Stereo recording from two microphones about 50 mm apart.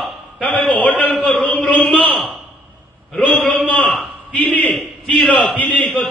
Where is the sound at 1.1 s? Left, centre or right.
Centre.